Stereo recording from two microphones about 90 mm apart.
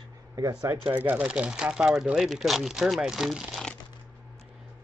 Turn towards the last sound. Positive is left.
turn(degrees=-5)  # may be behind; listen again after turning